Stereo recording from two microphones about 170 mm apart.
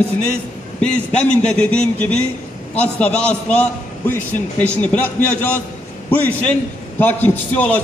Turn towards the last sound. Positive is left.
turn(degrees=10)  # may be behind; listen again after turning